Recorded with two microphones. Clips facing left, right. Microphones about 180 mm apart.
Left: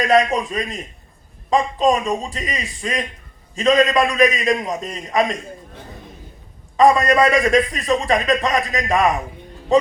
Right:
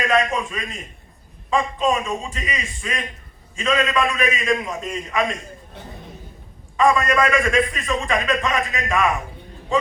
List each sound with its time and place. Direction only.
0.0 s a man's voice: 35° left (ahead or behind)
6.7 s a man's voice: 35° left (ahead or behind)